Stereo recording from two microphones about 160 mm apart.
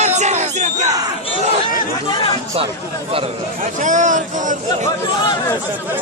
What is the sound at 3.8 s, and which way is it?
Speech, 50° right (ahead or behind).